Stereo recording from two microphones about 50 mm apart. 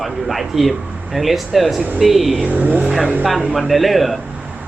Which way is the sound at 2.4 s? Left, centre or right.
Right.